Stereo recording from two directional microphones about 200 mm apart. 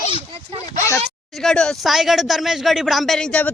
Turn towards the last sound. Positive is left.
turn(degrees=5)  # may be behind; listen again after turning